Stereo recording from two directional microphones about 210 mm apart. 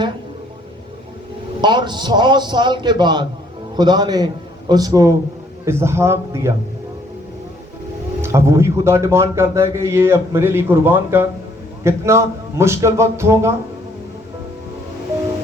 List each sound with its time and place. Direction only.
1.6 s a man's voice: 20° right (ahead or behind)
8.2 s a man's voice: 10° right (ahead or behind)